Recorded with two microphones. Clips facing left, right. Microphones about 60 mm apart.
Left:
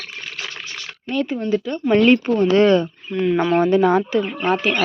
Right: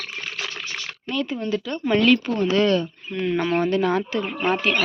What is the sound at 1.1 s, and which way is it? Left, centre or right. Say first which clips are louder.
Speech: left 4 dB; left.